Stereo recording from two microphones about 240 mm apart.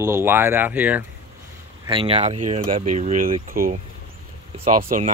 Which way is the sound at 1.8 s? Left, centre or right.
Right.